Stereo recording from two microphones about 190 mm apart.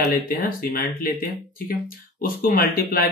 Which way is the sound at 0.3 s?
50° left (ahead or behind).